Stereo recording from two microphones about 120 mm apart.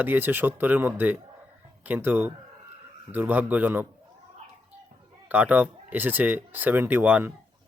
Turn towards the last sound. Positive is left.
turn(degrees=-10)  # may be behind; listen again after turning